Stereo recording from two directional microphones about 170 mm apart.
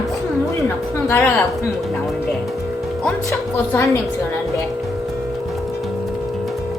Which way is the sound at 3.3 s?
15° left (ahead or behind).